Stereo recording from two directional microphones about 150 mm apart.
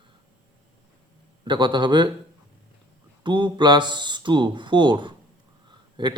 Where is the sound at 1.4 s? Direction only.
30° right (ahead or behind).